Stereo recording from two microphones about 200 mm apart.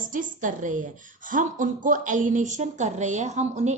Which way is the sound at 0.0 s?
40° right (ahead or behind).